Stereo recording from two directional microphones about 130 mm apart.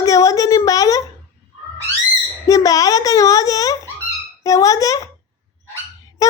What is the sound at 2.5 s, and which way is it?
A child's voice, 25° left (ahead or behind).